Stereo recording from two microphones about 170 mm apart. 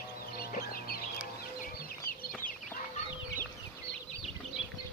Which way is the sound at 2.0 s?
60° left (ahead or behind).